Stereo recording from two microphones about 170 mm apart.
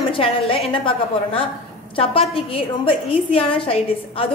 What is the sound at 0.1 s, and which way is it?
A woman's voice, 35° left (ahead or behind).